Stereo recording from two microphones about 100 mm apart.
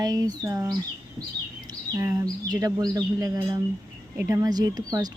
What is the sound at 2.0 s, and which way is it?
Speech, 35° right (ahead or behind).